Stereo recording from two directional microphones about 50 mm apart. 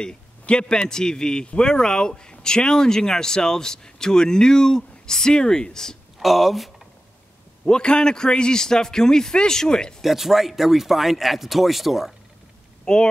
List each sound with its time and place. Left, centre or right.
0.0 s a man's voice: centre
6.1 s speech: centre
7.6 s a man's voice: centre
10.0 s speech: centre
12.8 s speech: centre